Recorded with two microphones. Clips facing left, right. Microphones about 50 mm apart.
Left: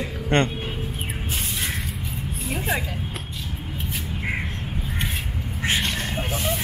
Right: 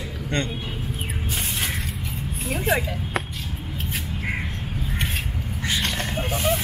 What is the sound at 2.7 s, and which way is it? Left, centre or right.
Speech, centre.